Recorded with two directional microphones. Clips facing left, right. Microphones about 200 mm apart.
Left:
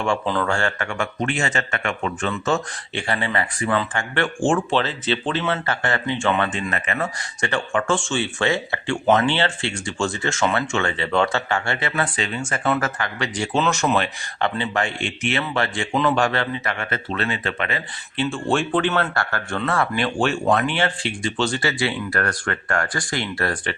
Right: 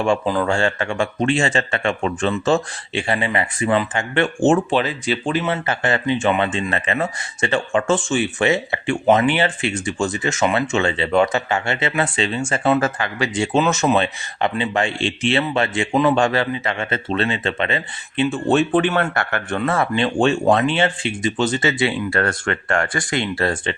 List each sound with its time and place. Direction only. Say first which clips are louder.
0.3 s speech: right 3 dB; 10° right (ahead or behind)
0.5 s speech: right 4 dB; 25° right (ahead or behind)
5.6 s speech: right 4 dB; 20° right (ahead or behind)
6.7 s speech: right 3 dB; 30° right (ahead or behind)